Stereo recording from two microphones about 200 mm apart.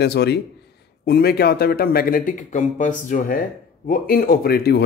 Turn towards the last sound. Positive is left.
turn(degrees=50)  # may be behind; listen again after turning